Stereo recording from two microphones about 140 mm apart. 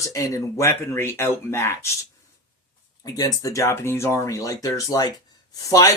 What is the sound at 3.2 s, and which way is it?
Speech, 25° left (ahead or behind).